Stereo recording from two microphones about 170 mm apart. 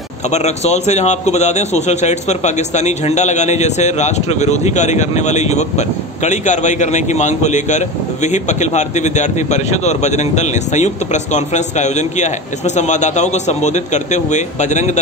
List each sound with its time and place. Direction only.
0.3 s a man's voice: 40° left (ahead or behind)